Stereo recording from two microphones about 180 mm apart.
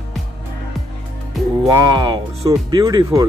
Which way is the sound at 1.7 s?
25° right (ahead or behind).